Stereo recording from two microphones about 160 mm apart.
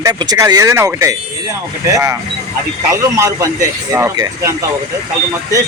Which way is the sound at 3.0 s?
20° right (ahead or behind).